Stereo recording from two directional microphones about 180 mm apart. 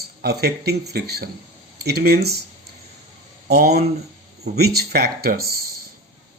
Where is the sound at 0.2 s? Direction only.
60° right (ahead or behind).